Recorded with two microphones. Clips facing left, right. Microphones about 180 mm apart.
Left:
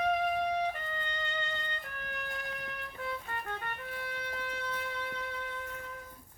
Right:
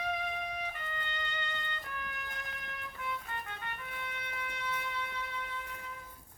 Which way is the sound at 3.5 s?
45° left (ahead or behind).